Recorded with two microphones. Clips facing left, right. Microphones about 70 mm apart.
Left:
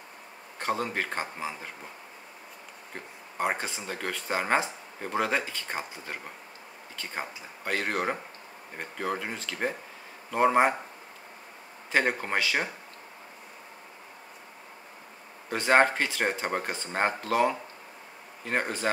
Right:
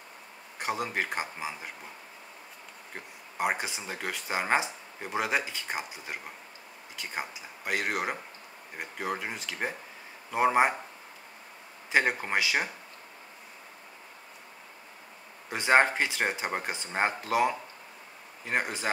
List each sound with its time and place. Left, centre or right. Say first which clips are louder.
0.6 s speech: left 1 dB; centre
3.3 s speech: even; centre
11.9 s speech: even; centre
15.5 s speech: left 1 dB; centre